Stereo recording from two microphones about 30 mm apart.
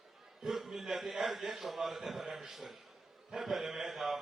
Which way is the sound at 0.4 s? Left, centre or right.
Centre.